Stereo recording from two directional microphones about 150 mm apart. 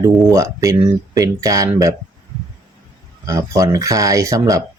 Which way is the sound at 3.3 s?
20° right (ahead or behind).